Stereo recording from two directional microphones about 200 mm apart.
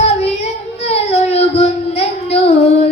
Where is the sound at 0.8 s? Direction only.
30° left (ahead or behind).